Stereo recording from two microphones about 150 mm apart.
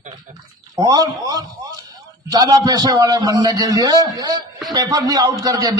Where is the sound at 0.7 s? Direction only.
25° right (ahead or behind).